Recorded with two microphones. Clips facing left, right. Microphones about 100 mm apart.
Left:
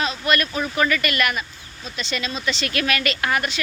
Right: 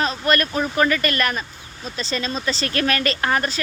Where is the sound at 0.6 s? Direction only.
30° right (ahead or behind).